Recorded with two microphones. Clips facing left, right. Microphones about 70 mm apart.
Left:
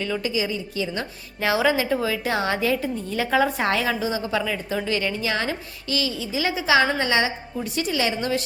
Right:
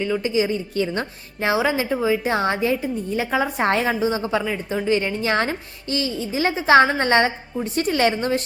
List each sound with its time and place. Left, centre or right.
0.0 s a woman's voice: right
0.3 s a woman's voice: right
1.4 s a woman's voice: right
3.6 s a woman's voice: right